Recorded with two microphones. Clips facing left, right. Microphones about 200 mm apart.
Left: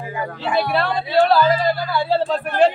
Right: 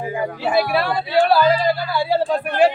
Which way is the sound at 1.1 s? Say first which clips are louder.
Even; 10° right (ahead or behind).